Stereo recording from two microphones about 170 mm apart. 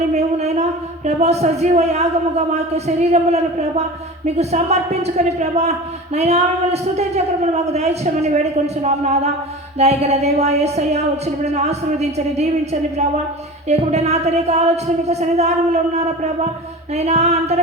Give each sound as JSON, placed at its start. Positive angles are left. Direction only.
{"t": 0.1, "sound": "a woman's voice", "side_deg": -40}
{"t": 13.7, "sound": "a woman's voice", "side_deg": -40}
{"t": 16.9, "sound": "a woman's voice", "side_deg": -40}